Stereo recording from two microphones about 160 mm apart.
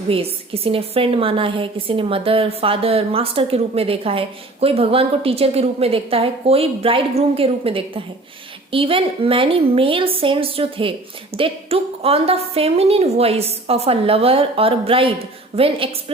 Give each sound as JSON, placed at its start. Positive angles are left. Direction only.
{"t": 0.1, "sound": "a woman's voice", "side_deg": -35}